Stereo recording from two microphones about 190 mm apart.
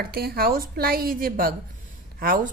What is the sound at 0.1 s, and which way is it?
Speech, 55° right (ahead or behind).